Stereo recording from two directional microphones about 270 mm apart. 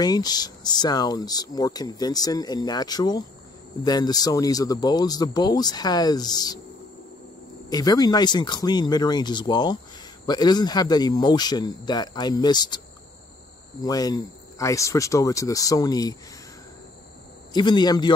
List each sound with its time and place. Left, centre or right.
0.0 s speech: centre
7.7 s speech: centre
17.5 s speech: centre